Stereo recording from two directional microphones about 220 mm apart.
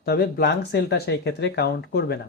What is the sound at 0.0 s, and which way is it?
Speech, 45° left (ahead or behind).